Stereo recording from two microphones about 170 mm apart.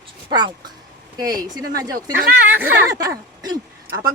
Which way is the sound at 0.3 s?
25° right (ahead or behind).